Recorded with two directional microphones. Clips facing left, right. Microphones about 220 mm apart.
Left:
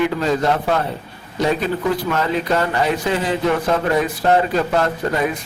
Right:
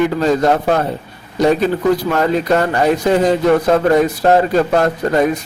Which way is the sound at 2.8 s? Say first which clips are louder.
Right 7 dB; 45° right (ahead or behind).